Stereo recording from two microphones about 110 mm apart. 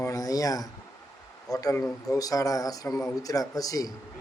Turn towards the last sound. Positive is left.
turn(degrees=35)  # may be behind; listen again after turning